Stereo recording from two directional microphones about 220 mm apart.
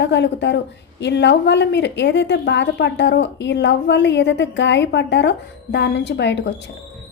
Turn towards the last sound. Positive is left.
turn(degrees=50)  # may be behind; listen again after turning